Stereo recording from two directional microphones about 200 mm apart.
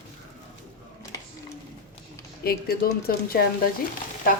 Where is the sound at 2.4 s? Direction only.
50° left (ahead or behind).